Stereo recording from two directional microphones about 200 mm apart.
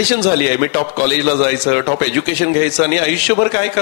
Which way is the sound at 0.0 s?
10° right (ahead or behind).